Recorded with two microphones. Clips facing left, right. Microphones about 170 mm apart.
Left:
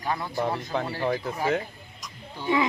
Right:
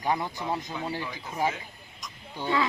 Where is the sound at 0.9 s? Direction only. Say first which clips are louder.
Left 9 dB; 50° left (ahead or behind).